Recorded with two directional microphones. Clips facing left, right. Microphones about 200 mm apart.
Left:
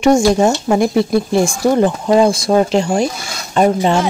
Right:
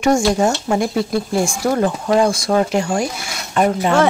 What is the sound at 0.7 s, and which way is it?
Speech, 20° left (ahead or behind).